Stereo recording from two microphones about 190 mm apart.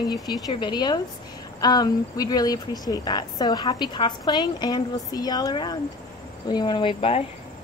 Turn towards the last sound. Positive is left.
turn(degrees=30)  # may be behind; listen again after turning